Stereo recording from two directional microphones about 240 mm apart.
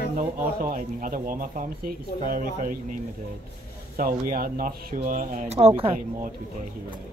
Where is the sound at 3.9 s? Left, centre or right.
Right.